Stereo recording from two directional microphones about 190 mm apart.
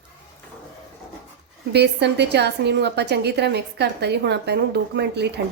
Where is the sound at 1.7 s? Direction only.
65° right (ahead or behind).